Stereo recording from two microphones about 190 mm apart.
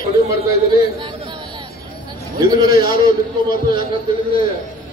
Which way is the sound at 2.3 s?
20° right (ahead or behind).